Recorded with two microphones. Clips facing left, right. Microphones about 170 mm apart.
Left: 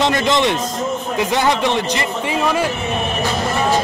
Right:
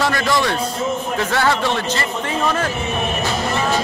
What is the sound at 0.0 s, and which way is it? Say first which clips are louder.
A man's voice: left 3 dB; 20° left (ahead or behind).